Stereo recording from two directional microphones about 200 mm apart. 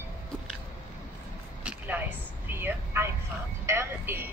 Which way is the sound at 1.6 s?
5° right (ahead or behind).